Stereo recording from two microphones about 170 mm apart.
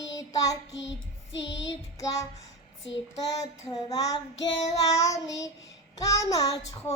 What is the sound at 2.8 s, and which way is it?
Child singing, 90° left.